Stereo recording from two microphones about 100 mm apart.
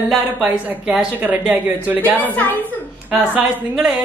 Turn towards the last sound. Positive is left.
turn(degrees=-15)  # may be behind; listen again after turning